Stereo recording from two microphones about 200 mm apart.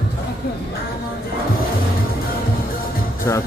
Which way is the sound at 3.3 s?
15° left (ahead or behind).